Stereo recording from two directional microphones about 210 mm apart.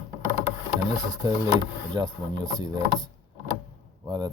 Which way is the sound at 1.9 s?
20° right (ahead or behind).